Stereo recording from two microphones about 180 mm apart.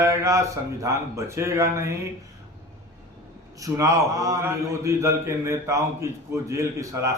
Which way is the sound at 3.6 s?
15° right (ahead or behind).